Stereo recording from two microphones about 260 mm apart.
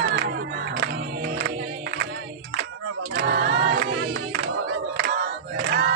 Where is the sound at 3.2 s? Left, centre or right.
Right.